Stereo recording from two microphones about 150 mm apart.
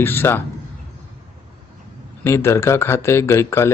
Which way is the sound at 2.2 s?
15° left (ahead or behind).